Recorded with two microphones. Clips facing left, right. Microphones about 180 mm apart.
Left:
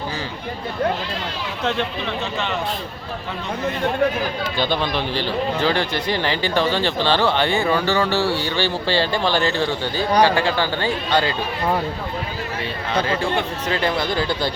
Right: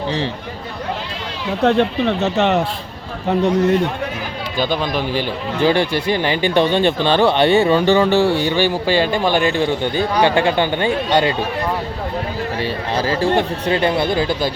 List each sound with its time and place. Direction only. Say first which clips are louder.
1.6 s speech: right 9 dB; 60° right (ahead or behind)
4.7 s speech: right 3 dB; 10° right (ahead or behind)
12.9 s speech: right 4 dB; 35° right (ahead or behind)
13.7 s speech: right 5 dB; 25° right (ahead or behind)